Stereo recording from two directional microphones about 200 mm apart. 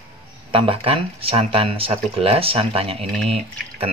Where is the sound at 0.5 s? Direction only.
25° right (ahead or behind).